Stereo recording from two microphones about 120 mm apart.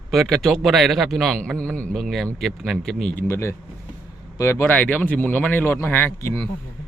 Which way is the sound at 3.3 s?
20° left (ahead or behind).